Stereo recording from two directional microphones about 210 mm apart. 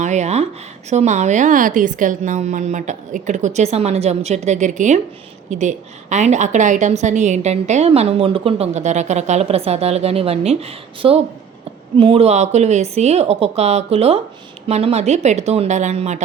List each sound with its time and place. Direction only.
0.0 s a woman's voice: 35° right (ahead or behind)